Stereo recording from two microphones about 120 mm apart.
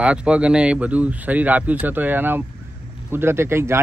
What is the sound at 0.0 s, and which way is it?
A man's voice, 10° right (ahead or behind).